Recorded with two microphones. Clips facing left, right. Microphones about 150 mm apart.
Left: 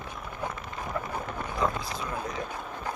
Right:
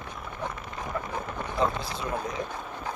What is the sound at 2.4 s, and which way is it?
Vehicle, 5° left (ahead or behind).